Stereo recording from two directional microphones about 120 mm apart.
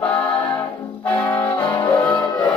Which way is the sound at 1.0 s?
15° left (ahead or behind).